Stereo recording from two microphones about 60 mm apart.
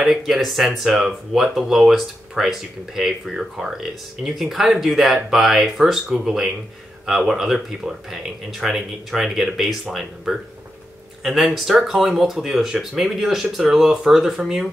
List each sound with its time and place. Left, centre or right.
0.0 s speech: centre